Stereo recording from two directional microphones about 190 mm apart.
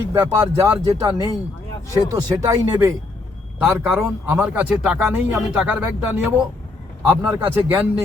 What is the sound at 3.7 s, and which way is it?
Speech, 10° right (ahead or behind).